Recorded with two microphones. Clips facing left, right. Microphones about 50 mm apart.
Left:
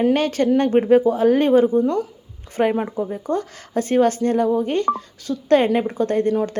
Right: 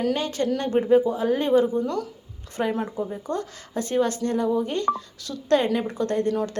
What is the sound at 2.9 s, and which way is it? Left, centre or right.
A woman's voice, left.